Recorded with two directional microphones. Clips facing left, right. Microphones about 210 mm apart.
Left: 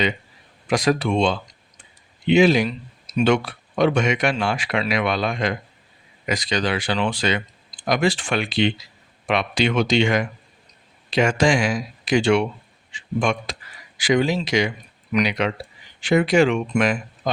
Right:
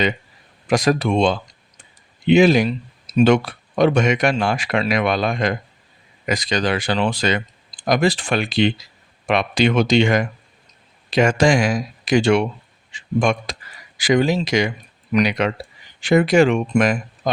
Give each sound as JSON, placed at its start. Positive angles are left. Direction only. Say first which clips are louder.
{"t": 0.7, "sound": "speech", "louder": "right 2 dB", "side_deg": -45}